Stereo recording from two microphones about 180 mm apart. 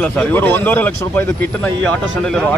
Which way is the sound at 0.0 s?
5° left (ahead or behind).